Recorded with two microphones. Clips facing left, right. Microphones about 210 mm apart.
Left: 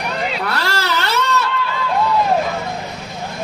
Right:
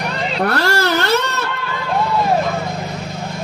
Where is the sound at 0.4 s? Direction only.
50° right (ahead or behind).